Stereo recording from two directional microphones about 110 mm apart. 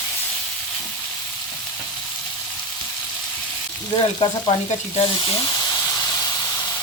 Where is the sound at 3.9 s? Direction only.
45° left (ahead or behind).